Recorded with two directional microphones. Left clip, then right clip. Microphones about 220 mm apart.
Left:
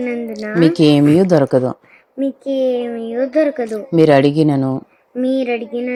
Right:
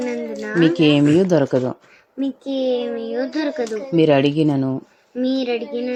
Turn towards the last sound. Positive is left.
turn(degrees=0)  # may be behind; listen again after turning